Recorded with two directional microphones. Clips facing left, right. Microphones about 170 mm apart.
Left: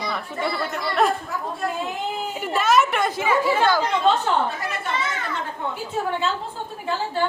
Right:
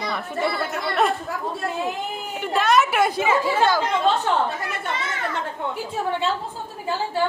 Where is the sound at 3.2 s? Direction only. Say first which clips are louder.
Even; 20° right (ahead or behind).